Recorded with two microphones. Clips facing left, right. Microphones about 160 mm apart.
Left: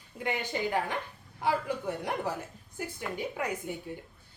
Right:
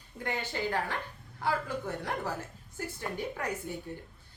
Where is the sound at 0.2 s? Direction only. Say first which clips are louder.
Left 2 dB; 15° left (ahead or behind).